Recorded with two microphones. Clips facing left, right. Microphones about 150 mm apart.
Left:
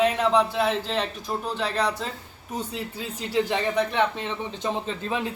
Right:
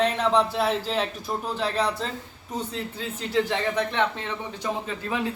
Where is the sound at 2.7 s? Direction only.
15° left (ahead or behind).